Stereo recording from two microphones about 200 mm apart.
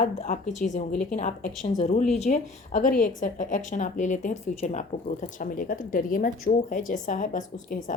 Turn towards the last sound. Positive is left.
turn(degrees=40)  # may be behind; listen again after turning